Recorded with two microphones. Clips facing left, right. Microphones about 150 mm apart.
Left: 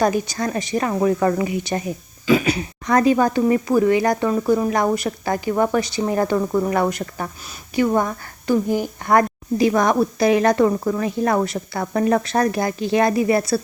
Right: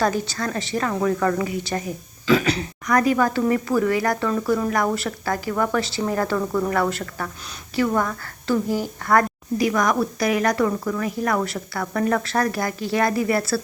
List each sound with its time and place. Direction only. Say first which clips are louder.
0.0 s a woman's voice: left 3 dB; 15° left (ahead or behind)
2.8 s a woman's voice: left 3 dB; 25° left (ahead or behind)